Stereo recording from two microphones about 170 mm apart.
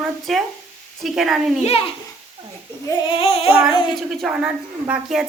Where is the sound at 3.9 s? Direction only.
Centre (ahead or behind).